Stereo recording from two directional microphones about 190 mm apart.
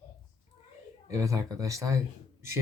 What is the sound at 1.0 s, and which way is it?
Speech, 15° right (ahead or behind).